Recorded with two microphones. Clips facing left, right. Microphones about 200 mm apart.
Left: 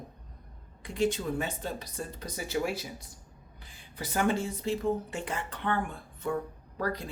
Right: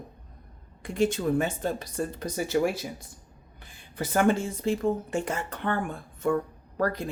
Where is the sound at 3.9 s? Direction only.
50° right (ahead or behind).